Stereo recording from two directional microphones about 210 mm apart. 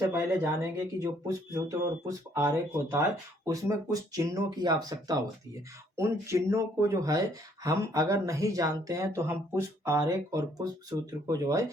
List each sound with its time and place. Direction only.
0.1 s speech: 10° right (ahead or behind)